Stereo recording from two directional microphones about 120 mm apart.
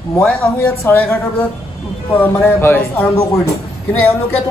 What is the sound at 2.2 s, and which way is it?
A man's voice, 20° left (ahead or behind).